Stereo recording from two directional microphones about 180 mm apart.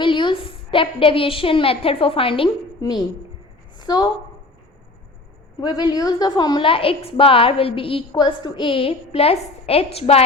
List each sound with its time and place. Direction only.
0.0 s a woman's voice: 25° left (ahead or behind)
5.5 s a woman's voice: 20° left (ahead or behind)